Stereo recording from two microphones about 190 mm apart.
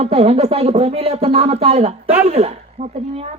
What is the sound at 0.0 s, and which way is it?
Speech, 30° right (ahead or behind).